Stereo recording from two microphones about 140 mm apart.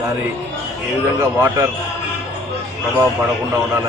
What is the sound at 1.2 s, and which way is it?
Speech, 25° right (ahead or behind).